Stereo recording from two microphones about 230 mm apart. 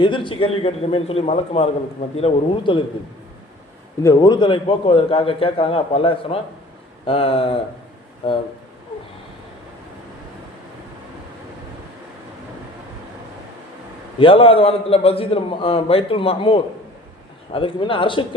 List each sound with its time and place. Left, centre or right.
0.0 s a man's voice: left
4.0 s a man's voice: centre
14.2 s a man's voice: left